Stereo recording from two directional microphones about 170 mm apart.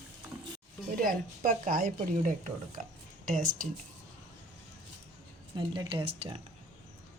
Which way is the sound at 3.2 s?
55° right (ahead or behind).